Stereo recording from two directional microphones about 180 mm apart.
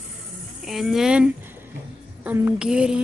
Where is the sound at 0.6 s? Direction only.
Centre (ahead or behind).